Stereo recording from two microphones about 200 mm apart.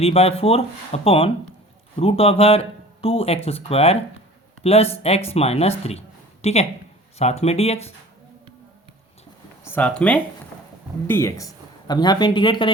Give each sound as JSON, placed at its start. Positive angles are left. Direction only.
{"t": 0.0, "sound": "speech", "side_deg": 30}
{"t": 9.6, "sound": "speech", "side_deg": 10}